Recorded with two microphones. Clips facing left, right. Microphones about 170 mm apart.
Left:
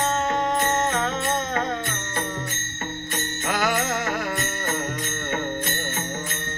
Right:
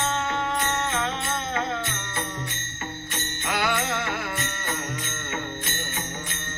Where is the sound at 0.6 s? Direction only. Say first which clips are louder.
Left 4 dB; 40° left (ahead or behind).